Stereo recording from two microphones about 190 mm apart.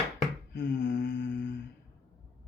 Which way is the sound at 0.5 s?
50° left (ahead or behind).